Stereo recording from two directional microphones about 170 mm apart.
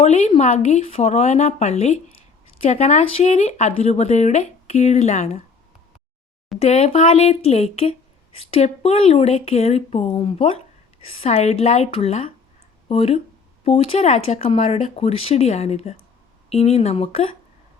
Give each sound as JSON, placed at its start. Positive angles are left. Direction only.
{"t": 0.0, "sound": "speech", "side_deg": 40}
{"t": 6.6, "sound": "speech", "side_deg": 40}